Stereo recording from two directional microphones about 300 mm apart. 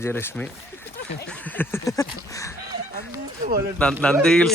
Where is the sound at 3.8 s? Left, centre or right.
Centre.